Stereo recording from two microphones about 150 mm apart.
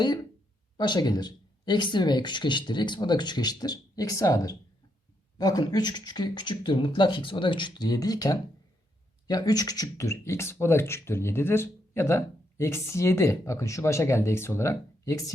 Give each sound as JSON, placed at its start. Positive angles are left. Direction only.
{"t": 0.8, "sound": "speech", "side_deg": 30}